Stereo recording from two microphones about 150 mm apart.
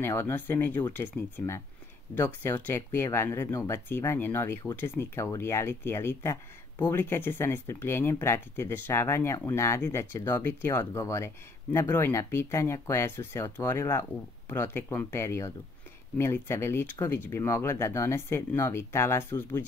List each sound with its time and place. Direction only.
0.0 s speech: 15° left (ahead or behind)